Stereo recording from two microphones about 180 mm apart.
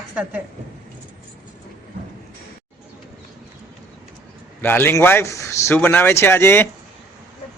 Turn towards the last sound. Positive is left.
turn(degrees=10)  # may be behind; listen again after turning